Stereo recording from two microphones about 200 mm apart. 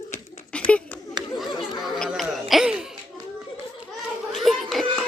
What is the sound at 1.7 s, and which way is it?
Music, centre (ahead or behind).